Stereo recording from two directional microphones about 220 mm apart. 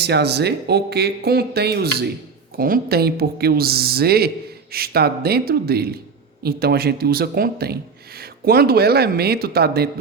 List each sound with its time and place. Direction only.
0.0 s speech: 50° right (ahead or behind)